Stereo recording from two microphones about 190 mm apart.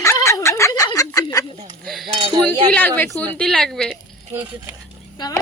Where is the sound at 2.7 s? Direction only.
10° left (ahead or behind).